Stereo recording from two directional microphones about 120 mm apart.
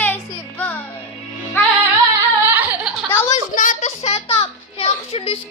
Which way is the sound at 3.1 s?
20° left (ahead or behind).